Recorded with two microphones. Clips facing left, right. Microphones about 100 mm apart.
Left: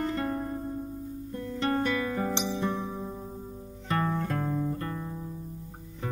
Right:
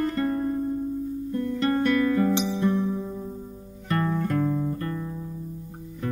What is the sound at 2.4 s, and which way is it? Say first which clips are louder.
Music: right 6 dB; centre (ahead or behind).